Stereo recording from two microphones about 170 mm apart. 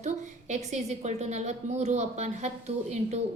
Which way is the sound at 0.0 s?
45° right (ahead or behind).